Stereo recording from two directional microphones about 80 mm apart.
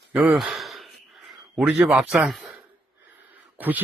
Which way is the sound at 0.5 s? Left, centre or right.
Centre.